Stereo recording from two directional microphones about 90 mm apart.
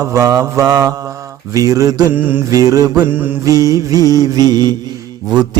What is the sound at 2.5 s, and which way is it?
Mantra, 40° right (ahead or behind).